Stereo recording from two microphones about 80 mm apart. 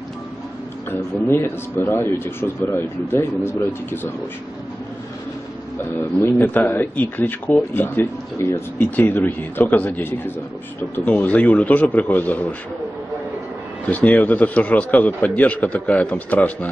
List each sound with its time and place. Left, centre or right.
1.2 s speech: left
5.9 s speech: left
8.7 s speech: left
11.1 s speech: centre
13.8 s speech: centre